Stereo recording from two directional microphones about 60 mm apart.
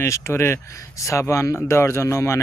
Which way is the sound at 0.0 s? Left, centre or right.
Left.